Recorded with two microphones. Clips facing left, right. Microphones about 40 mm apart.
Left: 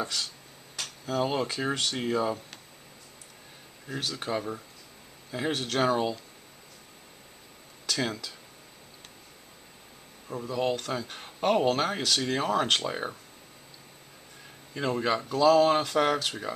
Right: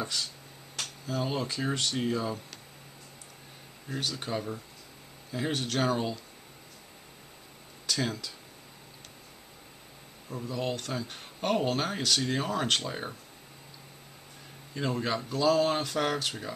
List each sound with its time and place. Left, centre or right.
1.0 s speech: left
3.8 s speech: centre
7.9 s speech: centre
10.2 s speech: centre
14.7 s speech: centre